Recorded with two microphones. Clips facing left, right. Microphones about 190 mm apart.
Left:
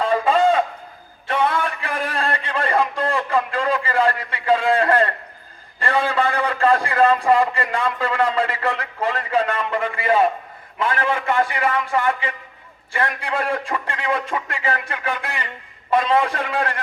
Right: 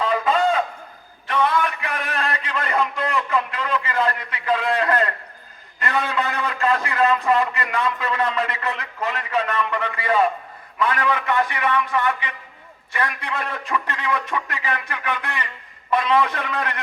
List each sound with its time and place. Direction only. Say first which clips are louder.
0.0 s fowl: left 2 dB; 30° left (ahead or behind)
1.3 s a sound: even; 30° left (ahead or behind)
5.8 s a man's voice: left 4 dB; 30° left (ahead or behind)